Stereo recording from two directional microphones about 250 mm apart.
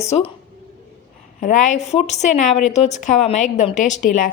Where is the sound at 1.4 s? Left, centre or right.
Left.